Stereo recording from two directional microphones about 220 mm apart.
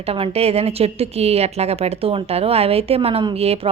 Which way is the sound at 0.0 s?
25° right (ahead or behind).